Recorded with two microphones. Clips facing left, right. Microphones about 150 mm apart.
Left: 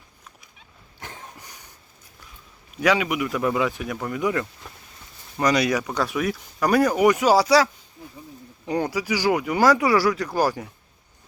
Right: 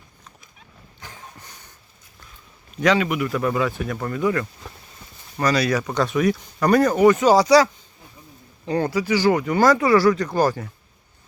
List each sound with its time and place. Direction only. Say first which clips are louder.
2.8 s speech: right 2 dB; 10° left (ahead or behind)
5.8 s speech: right 4 dB; 5° left (ahead or behind)